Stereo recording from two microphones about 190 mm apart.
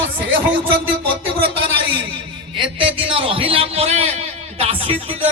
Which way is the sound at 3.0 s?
30° right (ahead or behind).